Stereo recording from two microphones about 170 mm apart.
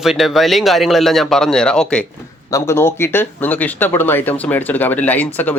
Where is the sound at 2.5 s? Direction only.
15° left (ahead or behind).